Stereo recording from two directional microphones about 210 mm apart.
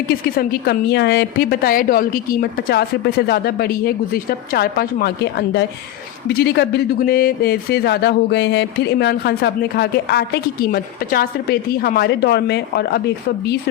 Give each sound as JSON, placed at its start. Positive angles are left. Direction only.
{"t": 0.1, "sound": "speech", "side_deg": 45}